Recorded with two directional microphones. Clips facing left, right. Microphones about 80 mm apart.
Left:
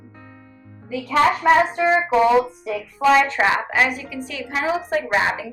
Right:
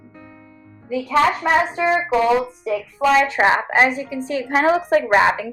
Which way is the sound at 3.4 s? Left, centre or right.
Right.